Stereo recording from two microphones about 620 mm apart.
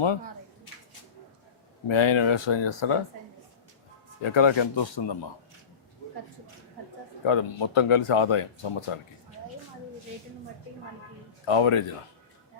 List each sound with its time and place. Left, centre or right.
1.9 s speech: left
4.2 s speech: left
7.3 s speech: left
11.4 s speech: left